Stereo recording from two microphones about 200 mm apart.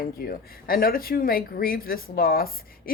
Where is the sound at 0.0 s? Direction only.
45° left (ahead or behind).